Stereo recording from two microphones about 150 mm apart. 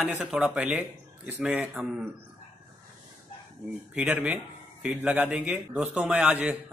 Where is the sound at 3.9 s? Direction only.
10° right (ahead or behind).